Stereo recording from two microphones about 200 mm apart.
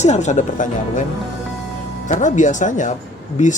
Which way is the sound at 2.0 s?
40° left (ahead or behind).